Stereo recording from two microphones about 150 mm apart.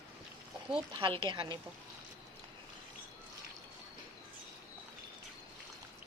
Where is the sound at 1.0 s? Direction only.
35° right (ahead or behind).